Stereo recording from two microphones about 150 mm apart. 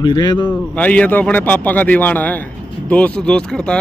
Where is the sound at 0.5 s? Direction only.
10° left (ahead or behind).